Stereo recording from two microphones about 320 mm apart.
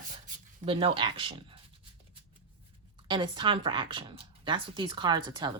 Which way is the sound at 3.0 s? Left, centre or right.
Centre.